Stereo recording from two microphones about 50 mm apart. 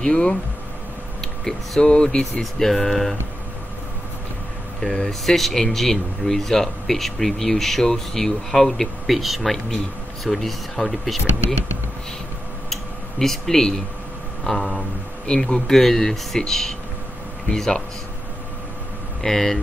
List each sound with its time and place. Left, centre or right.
0.0 s speech: centre
1.4 s speech: centre
4.8 s speech: centre
5.2 s speech: centre
13.2 s speech: centre
19.2 s speech: centre